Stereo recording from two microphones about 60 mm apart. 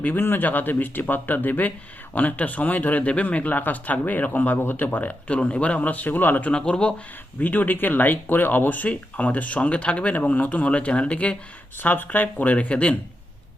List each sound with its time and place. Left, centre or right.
0.0 s speech: left
6.5 s speech: centre
7.3 s speech: left
11.8 s speech: left